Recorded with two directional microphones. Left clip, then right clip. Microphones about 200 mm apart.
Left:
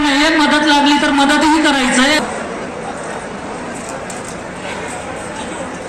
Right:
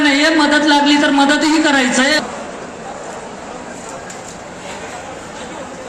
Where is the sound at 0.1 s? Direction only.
40° left (ahead or behind).